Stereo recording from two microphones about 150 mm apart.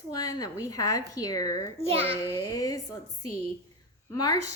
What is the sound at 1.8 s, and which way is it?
Speech, 40° right (ahead or behind).